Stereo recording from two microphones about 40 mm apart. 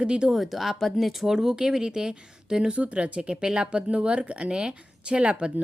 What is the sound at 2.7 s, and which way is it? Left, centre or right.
Speech, right.